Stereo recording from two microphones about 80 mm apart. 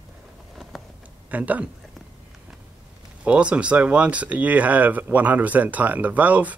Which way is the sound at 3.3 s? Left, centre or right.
Centre.